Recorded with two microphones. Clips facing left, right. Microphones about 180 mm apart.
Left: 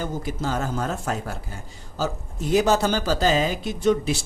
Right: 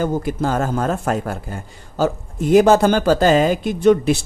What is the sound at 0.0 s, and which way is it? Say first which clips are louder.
Speech: right 8 dB; 55° right (ahead or behind).